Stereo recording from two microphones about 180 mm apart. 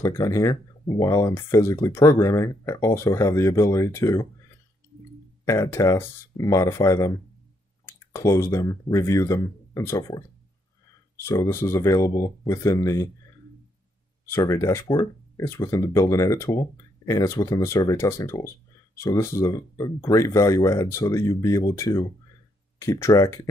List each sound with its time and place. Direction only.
0.0 s speech: 20° left (ahead or behind)
5.5 s speech: 15° left (ahead or behind)
11.2 s speech: 15° left (ahead or behind)
14.3 s speech: 15° left (ahead or behind)